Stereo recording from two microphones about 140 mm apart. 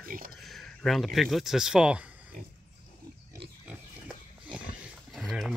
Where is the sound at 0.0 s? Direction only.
90° right.